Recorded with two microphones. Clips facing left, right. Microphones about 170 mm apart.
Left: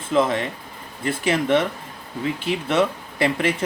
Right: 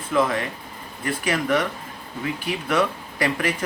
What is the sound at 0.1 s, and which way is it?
Speech, 25° left (ahead or behind).